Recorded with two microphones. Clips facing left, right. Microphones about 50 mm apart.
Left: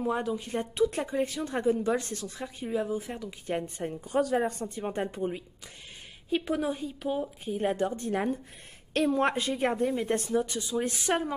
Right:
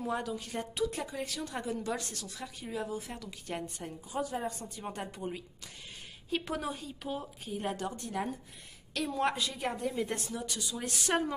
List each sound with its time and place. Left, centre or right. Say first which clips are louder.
0.0 s speech: left 5 dB; centre
0.8 s speech: left 7 dB; left
4.4 s a woman's voice: left 8 dB; left
4.8 s speech: left 7 dB; left
6.3 s speech: left 6 dB; centre; by 8.1 s left
8.9 s a woman's voice: left 6 dB; left; by 11.3 s centre